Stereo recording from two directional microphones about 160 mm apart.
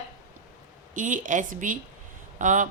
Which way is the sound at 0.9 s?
55° right (ahead or behind).